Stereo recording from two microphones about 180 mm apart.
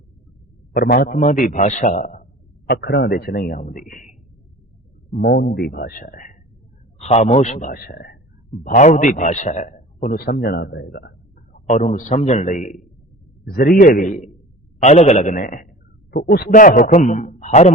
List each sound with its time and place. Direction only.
0.7 s a man's voice: 50° left (ahead or behind)
2.8 s speech: 70° left (ahead or behind); by 4.1 s 50° left (ahead or behind)
5.1 s speech: 60° left (ahead or behind)
7.0 s a man's voice: 35° left (ahead or behind); by 11.1 s 65° left (ahead or behind)
11.5 s a man's voice: 40° left (ahead or behind)
13.5 s a man's voice: 55° left (ahead or behind)
16.1 s speech: 60° left (ahead or behind)
16.5 s a man's voice: 45° left (ahead or behind)